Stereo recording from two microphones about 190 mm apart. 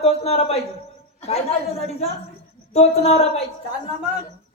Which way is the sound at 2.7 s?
35° left (ahead or behind).